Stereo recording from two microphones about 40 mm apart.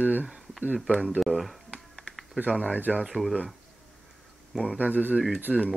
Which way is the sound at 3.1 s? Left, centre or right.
Centre.